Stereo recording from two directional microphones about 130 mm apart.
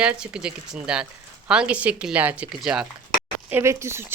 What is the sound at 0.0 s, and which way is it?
Speech, 5° right (ahead or behind).